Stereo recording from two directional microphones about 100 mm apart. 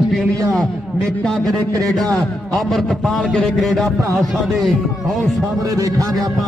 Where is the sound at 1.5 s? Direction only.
40° right (ahead or behind).